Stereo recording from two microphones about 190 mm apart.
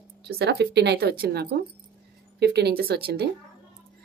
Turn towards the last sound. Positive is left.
turn(degrees=-55)  # may be behind; listen again after turning